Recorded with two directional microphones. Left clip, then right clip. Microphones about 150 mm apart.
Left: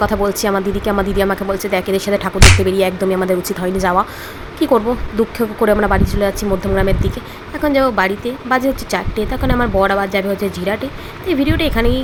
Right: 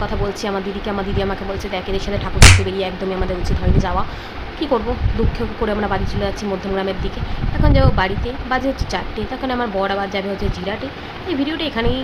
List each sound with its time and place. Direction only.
0.0 s speech: 40° left (ahead or behind)
2.4 s music: centre (ahead or behind)
2.7 s music: 40° left (ahead or behind)
4.6 s speech: 35° left (ahead or behind)
11.3 s speech: 30° left (ahead or behind)